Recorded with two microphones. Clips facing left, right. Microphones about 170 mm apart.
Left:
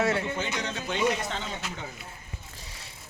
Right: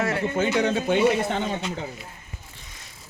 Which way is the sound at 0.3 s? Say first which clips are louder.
Right 10 dB; 55° right (ahead or behind).